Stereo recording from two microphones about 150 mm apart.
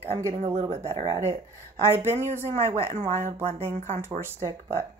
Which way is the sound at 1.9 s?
15° right (ahead or behind).